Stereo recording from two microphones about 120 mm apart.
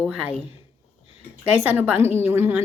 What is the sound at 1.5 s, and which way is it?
Speech, 15° right (ahead or behind).